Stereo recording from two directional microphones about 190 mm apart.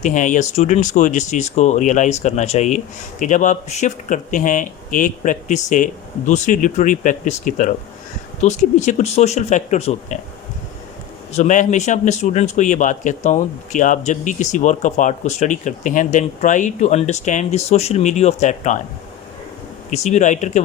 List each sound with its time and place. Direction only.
0.0 s speech: 40° left (ahead or behind)
11.3 s speech: 40° left (ahead or behind)
19.9 s speech: 35° left (ahead or behind)